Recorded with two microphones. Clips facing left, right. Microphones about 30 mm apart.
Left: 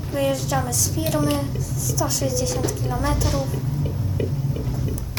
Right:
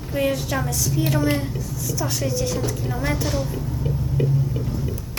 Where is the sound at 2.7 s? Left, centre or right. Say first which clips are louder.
Left 1 dB; centre.